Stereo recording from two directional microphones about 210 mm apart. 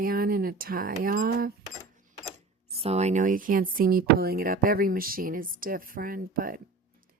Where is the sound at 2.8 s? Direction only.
30° right (ahead or behind).